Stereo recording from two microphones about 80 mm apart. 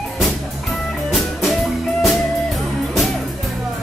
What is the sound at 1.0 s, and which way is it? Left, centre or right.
Music, centre.